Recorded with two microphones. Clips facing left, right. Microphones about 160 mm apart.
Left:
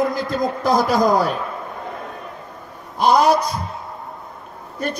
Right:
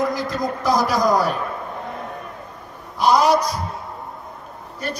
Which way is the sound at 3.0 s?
55° left (ahead or behind).